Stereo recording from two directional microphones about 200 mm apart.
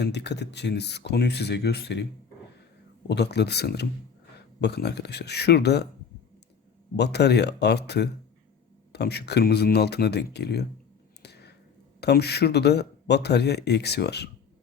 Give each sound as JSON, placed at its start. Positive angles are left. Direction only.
{"t": 0.0, "sound": "a man's voice", "side_deg": 55}
{"t": 3.1, "sound": "a man's voice", "side_deg": 55}
{"t": 6.9, "sound": "a man's voice", "side_deg": 55}
{"t": 11.2, "sound": "a sound", "side_deg": 55}
{"t": 11.9, "sound": "a man's voice", "side_deg": 55}